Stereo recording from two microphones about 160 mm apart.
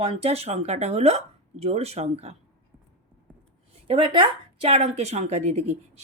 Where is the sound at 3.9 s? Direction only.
35° right (ahead or behind).